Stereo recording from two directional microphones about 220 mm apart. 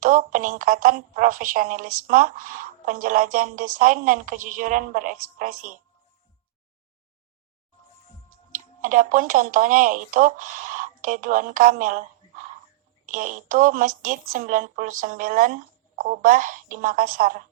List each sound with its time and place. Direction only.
0.0 s a woman's voice: 35° right (ahead or behind)
8.5 s a woman's voice: 35° right (ahead or behind)